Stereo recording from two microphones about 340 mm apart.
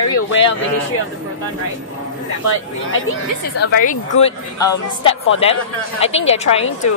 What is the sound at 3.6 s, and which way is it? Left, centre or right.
Speech, left.